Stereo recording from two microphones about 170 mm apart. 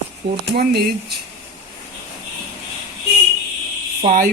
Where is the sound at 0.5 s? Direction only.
70° right (ahead or behind).